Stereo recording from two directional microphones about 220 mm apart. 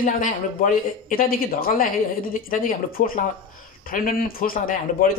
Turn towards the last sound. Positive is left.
turn(degrees=40)  # may be behind; listen again after turning